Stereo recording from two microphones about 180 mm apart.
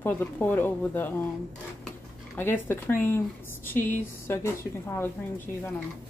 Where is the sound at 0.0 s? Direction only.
10° left (ahead or behind).